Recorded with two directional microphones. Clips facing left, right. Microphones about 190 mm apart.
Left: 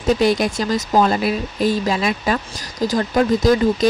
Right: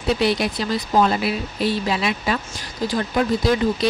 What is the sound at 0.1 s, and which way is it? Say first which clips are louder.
A woman's voice: left 4 dB; 45° left (ahead or behind).